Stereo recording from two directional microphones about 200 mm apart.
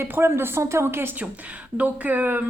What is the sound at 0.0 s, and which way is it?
A woman's voice, 10° right (ahead or behind).